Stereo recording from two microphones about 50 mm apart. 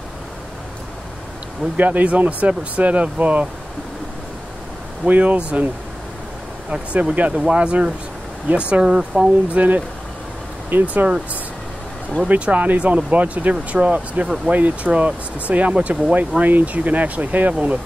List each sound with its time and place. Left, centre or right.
1.8 s speech: right
5.0 s speech: right
6.7 s speech: right; by 9.3 s centre
9.5 s speech: right
12.3 s speech: right
14.2 s speech: centre
14.5 s speech: right